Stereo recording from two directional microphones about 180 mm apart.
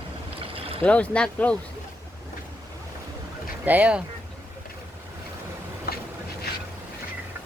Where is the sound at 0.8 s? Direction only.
5° left (ahead or behind).